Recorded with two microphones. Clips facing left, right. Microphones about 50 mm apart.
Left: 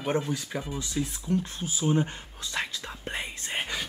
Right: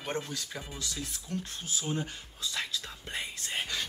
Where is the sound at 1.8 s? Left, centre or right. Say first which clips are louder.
Left 9 dB; left.